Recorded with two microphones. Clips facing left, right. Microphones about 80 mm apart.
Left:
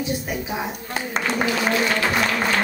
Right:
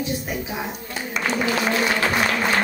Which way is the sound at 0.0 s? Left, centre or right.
Centre.